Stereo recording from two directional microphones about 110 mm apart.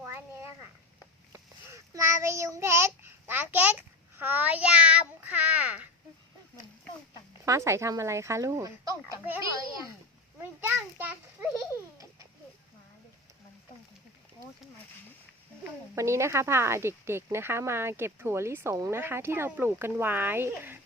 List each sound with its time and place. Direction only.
1.3 s a child's voice: 25° right (ahead or behind)
7.4 s speech: 25° right (ahead or behind)
10.4 s a child's voice: 20° right (ahead or behind)
16.0 s speech: 25° right (ahead or behind)